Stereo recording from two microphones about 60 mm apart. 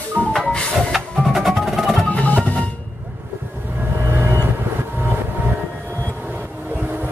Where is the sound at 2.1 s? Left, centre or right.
Left.